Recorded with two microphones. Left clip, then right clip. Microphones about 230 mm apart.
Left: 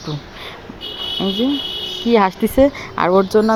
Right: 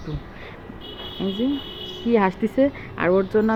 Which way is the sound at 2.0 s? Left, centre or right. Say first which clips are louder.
Left 5 dB; centre.